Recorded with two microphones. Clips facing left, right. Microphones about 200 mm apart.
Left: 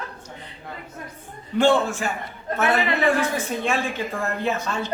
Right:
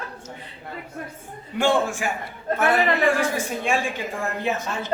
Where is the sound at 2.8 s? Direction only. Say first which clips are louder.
Right 1 dB; 45° right (ahead or behind).